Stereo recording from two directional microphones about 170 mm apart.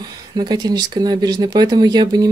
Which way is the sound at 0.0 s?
25° right (ahead or behind).